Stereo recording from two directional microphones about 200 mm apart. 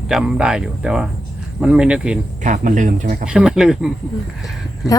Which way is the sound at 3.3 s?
5° right (ahead or behind).